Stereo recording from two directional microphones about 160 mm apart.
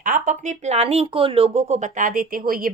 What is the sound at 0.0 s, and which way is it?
Speech, 55° right (ahead or behind).